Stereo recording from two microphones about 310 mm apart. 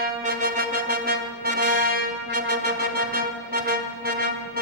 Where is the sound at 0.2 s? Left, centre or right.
Right.